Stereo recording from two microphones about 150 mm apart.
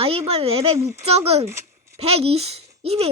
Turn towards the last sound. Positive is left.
turn(degrees=-45)  # may be behind; listen again after turning